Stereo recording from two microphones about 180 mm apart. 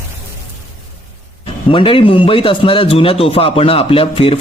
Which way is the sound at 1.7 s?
30° left (ahead or behind).